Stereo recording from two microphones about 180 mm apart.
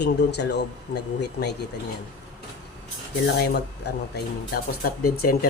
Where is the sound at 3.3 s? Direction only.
65° left (ahead or behind).